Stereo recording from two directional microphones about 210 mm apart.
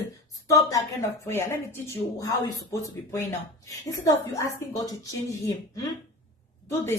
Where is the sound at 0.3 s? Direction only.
15° left (ahead or behind).